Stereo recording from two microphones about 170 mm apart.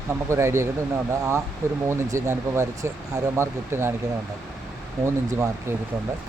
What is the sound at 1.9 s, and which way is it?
Speech, 15° right (ahead or behind).